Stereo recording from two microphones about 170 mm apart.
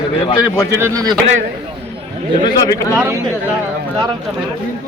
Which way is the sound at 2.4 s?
20° left (ahead or behind).